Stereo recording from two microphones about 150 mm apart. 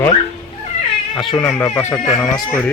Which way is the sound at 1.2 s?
25° left (ahead or behind).